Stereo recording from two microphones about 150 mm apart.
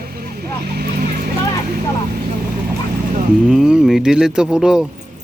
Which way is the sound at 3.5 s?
5° right (ahead or behind).